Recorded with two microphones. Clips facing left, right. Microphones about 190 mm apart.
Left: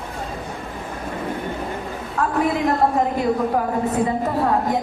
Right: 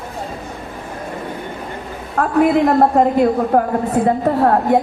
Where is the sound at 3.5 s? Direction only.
60° right (ahead or behind).